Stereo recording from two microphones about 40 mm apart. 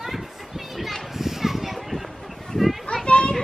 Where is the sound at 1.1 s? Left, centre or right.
Centre.